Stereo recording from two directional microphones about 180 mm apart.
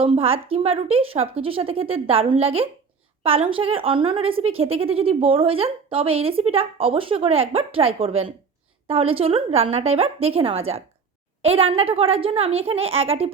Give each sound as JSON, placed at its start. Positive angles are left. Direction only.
{"t": 0.0, "sound": "speech", "side_deg": -30}